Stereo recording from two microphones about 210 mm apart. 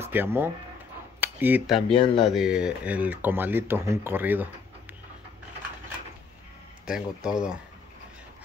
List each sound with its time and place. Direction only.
0.0 s speech: 10° right (ahead or behind)
1.9 s speech: 25° left (ahead or behind)
2.2 s speech: 5° right (ahead or behind)
6.9 s speech: 5° right (ahead or behind)